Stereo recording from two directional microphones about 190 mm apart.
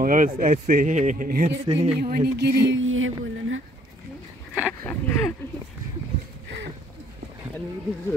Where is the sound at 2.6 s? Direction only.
85° right.